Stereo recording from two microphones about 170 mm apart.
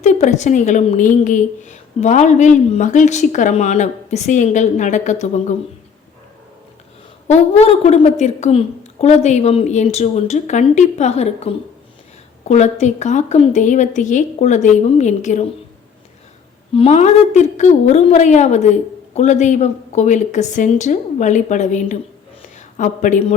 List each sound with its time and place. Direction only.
0.0 s a woman's voice: 45° left (ahead or behind)
7.3 s a woman's voice: 40° left (ahead or behind)
16.7 s a woman's voice: 40° left (ahead or behind)